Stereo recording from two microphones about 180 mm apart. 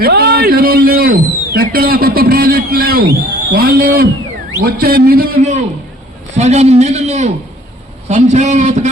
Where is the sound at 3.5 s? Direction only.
55° right (ahead or behind).